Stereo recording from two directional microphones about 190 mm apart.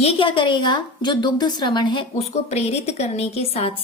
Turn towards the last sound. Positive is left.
turn(degrees=30)  # may be behind; listen again after turning